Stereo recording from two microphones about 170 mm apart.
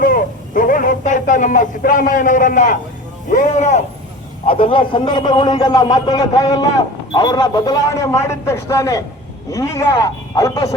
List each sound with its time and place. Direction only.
0.0 s a man's voice: 55° left (ahead or behind)
4.4 s a man's voice: 30° left (ahead or behind)